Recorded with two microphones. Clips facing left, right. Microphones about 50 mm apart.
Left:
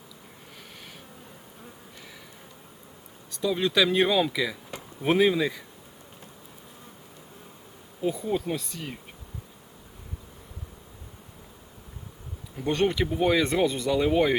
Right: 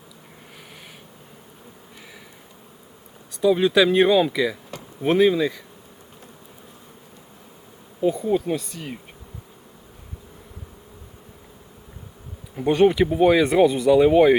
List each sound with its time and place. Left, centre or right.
3.3 s speech: centre
4.7 s a sound: left
5.0 s speech: centre
8.0 s speech: centre
12.5 s speech: centre